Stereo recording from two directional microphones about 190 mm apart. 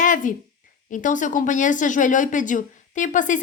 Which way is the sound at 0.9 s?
40° left (ahead or behind).